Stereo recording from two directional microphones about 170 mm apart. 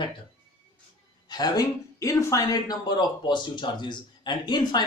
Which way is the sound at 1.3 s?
25° left (ahead or behind).